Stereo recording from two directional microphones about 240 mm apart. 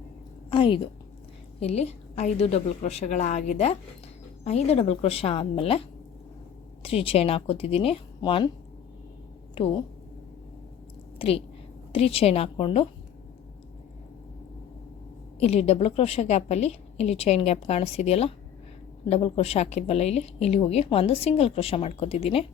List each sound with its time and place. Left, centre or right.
0.5 s a woman's voice: left
6.8 s a woman's voice: left
9.6 s a woman's voice: left
11.2 s a woman's voice: left
15.4 s a woman's voice: left